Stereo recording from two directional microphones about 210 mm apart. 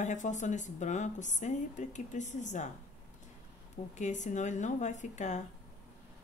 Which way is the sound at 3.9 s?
35° left (ahead or behind).